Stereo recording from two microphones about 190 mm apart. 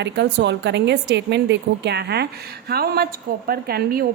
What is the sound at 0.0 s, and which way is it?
A woman's voice, 65° right (ahead or behind).